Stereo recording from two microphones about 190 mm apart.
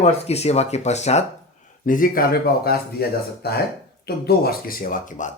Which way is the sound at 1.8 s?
45° left (ahead or behind).